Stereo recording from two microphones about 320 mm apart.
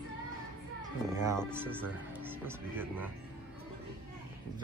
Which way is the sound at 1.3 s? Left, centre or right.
Centre.